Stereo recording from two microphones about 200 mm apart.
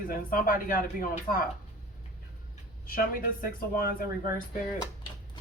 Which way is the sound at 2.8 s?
45° left (ahead or behind).